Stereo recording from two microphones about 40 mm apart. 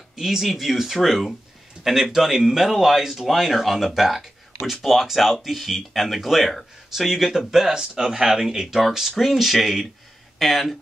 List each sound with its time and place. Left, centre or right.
0.1 s speech: centre